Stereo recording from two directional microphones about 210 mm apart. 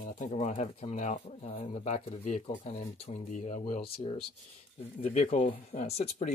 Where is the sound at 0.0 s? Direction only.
35° left (ahead or behind).